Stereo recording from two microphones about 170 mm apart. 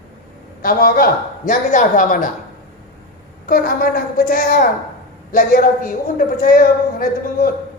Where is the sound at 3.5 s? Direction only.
60° left (ahead or behind).